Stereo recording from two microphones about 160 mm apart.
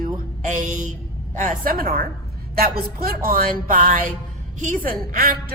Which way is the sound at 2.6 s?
70° right (ahead or behind).